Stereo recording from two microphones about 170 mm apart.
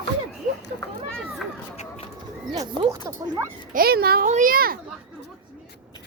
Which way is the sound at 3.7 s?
60° right (ahead or behind).